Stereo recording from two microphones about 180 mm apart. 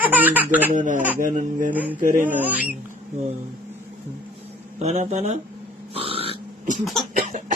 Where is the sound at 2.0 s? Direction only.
50° right (ahead or behind).